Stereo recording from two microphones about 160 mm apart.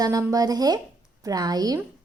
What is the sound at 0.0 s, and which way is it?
Speech, 20° right (ahead or behind).